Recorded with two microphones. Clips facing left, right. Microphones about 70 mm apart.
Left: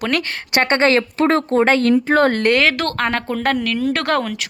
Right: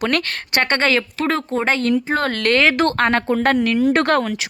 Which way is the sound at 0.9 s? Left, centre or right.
Left.